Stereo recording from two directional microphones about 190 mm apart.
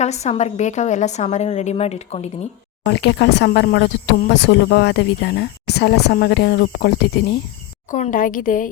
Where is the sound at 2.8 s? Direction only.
65° left (ahead or behind).